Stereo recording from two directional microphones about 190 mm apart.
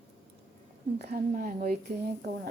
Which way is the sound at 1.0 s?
55° right (ahead or behind).